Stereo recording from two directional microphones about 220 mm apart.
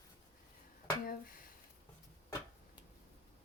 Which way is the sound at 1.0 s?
40° left (ahead or behind).